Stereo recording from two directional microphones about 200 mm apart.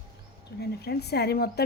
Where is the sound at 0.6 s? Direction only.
55° left (ahead or behind).